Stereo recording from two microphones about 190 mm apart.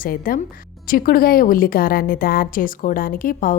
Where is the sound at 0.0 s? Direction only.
50° left (ahead or behind).